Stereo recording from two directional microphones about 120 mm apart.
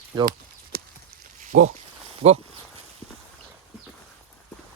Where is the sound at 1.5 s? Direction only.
90° right.